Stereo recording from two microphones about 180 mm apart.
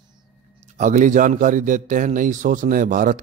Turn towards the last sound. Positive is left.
turn(degrees=-50)  # may be behind; listen again after turning